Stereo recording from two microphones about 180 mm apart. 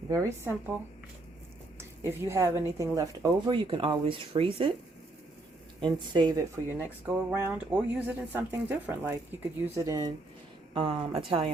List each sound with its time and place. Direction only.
0.1 s speech: 15° right (ahead or behind)
2.0 s speech: 15° right (ahead or behind)
5.8 s speech: 25° right (ahead or behind)
7.0 s speech: 10° right (ahead or behind)
10.8 s speech: 30° right (ahead or behind)